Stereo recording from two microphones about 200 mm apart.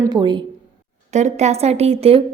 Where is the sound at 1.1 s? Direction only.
35° right (ahead or behind).